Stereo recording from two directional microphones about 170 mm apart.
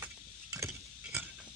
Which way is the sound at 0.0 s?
20° right (ahead or behind).